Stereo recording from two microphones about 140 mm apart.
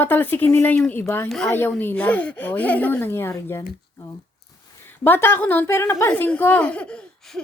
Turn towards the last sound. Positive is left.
turn(degrees=5)  # may be behind; listen again after turning